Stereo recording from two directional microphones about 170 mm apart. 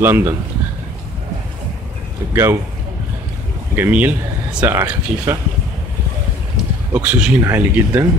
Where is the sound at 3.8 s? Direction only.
10° right (ahead or behind).